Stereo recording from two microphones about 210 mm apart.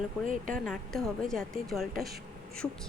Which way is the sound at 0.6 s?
Centre (ahead or behind).